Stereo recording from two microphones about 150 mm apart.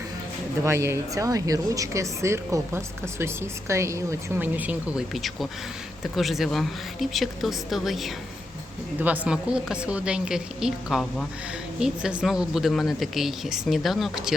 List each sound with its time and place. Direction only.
0.6 s a woman's voice: 20° right (ahead or behind); by 14.3 s centre (ahead or behind)